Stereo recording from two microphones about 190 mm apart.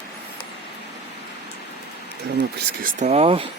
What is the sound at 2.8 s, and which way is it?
Speech, 35° right (ahead or behind).